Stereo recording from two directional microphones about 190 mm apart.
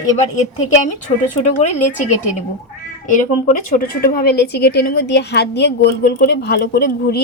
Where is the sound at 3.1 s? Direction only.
45° left (ahead or behind).